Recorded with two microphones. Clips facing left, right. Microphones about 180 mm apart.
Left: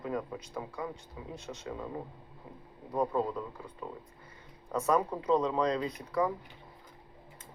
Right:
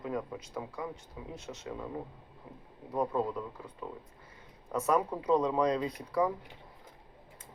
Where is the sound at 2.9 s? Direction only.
5° right (ahead or behind).